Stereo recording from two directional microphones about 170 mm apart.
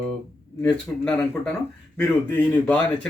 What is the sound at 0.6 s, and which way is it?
A man's voice, 10° left (ahead or behind).